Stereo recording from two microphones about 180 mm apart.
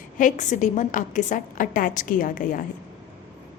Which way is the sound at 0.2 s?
45° left (ahead or behind).